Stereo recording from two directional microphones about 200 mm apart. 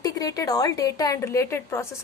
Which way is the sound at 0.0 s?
20° left (ahead or behind).